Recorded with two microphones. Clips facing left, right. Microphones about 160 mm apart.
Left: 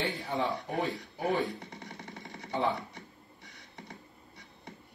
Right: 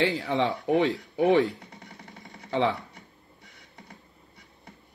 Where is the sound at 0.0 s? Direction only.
90° right.